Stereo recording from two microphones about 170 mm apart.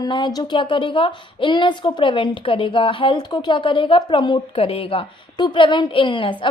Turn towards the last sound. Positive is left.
turn(degrees=30)  # may be behind; listen again after turning